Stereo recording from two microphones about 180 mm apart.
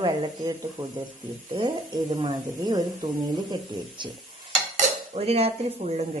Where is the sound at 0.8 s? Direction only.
10° right (ahead or behind).